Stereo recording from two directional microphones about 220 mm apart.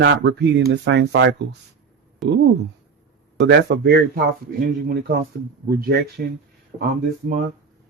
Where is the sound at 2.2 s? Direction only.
Centre (ahead or behind).